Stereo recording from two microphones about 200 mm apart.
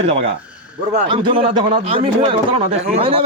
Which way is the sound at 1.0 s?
25° right (ahead or behind).